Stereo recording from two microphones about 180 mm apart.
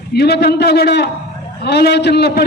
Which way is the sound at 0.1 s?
65° left (ahead or behind).